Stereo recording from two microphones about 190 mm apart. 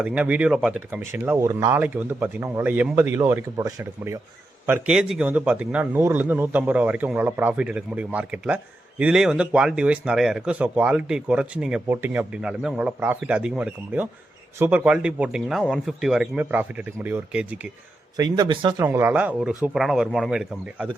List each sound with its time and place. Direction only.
0.0 s a man's voice: 5° right (ahead or behind)
18.2 s a man's voice: 25° right (ahead or behind)
18.8 s a man's voice: 10° right (ahead or behind)